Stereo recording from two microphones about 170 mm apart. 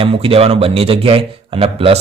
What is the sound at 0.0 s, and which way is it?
Speech, 35° right (ahead or behind).